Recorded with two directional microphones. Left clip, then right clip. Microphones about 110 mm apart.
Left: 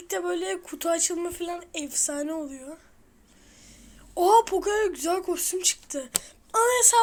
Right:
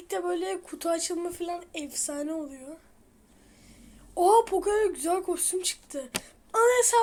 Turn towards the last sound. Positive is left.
turn(degrees=35)  # may be behind; listen again after turning